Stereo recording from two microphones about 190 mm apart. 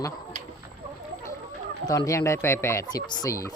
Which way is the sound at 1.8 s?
20° left (ahead or behind).